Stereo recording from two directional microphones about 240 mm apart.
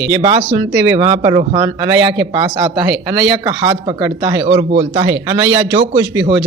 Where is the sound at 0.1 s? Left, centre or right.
Right.